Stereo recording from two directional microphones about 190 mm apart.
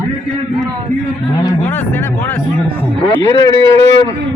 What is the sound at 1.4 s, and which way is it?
Speech, 10° left (ahead or behind).